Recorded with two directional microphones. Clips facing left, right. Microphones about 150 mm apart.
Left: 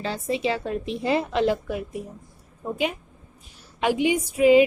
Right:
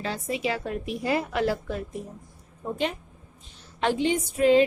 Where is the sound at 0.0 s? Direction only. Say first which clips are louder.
Left 3 dB; 30° left (ahead or behind).